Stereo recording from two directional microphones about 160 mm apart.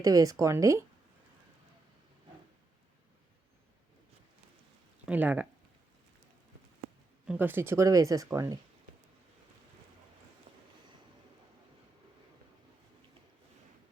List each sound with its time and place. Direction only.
0.0 s speech: 20° right (ahead or behind)
5.0 s speech: 10° right (ahead or behind)
7.3 s speech: 10° right (ahead or behind)
10.5 s a sound: 40° right (ahead or behind)